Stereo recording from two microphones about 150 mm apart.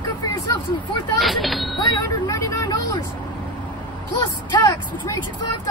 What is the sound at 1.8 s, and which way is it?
Vehicle, 30° left (ahead or behind).